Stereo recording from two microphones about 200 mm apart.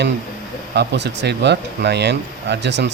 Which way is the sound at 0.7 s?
55° right (ahead or behind).